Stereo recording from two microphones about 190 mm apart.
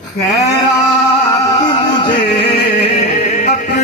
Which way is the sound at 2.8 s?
35° left (ahead or behind).